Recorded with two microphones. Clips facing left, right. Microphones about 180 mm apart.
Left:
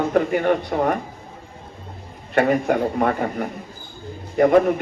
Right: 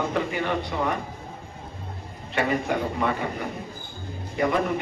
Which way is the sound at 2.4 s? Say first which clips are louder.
Left 7 dB; 50° left (ahead or behind).